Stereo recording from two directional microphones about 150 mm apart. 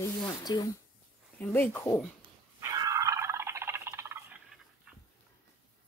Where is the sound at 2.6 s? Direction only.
20° right (ahead or behind).